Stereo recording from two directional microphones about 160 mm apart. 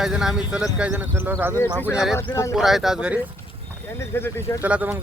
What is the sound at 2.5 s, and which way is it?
Speech, centre (ahead or behind).